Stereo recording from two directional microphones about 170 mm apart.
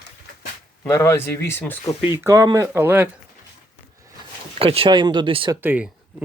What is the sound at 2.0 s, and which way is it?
Speech, 15° right (ahead or behind).